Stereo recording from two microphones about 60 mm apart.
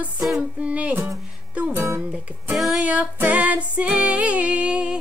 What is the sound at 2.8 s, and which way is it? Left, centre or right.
Music, right.